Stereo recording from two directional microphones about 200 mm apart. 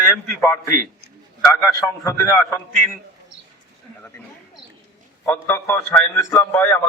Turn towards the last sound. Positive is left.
turn(degrees=10)  # may be behind; listen again after turning